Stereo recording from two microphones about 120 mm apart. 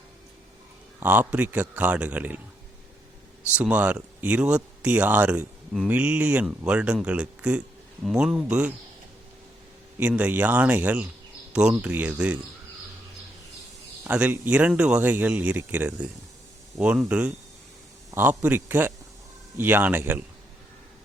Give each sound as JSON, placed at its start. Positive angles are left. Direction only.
{"t": 0.9, "sound": "speech", "side_deg": -15}
{"t": 3.5, "sound": "speech", "side_deg": -10}
{"t": 10.0, "sound": "speech", "side_deg": -10}
{"t": 14.0, "sound": "speech", "side_deg": -15}
{"t": 16.7, "sound": "speech", "side_deg": -5}